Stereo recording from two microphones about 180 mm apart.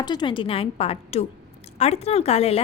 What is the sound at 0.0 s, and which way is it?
A woman's voice, 25° left (ahead or behind).